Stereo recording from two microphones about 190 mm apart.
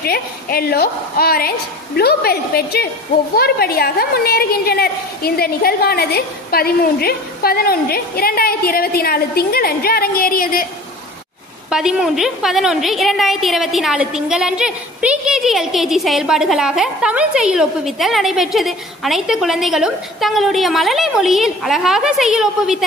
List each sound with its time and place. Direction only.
0.0 s a woman's voice: 55° left (ahead or behind)
11.7 s a woman's voice: 5° right (ahead or behind)